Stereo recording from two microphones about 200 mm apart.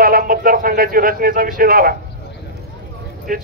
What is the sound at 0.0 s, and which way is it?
Speech, 45° right (ahead or behind).